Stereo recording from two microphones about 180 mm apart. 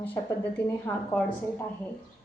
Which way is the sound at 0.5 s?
10° left (ahead or behind).